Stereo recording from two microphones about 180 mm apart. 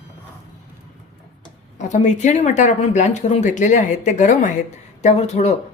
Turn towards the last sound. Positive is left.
turn(degrees=35)  # may be behind; listen again after turning